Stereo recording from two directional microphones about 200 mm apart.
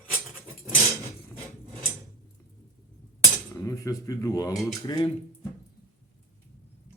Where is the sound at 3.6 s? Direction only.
15° left (ahead or behind).